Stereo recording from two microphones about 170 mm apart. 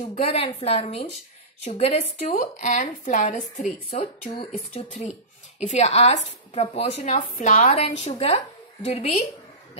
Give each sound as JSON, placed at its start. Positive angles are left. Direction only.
{"t": 0.1, "sound": "speech", "side_deg": 35}
{"t": 2.2, "sound": "a woman's voice", "side_deg": 45}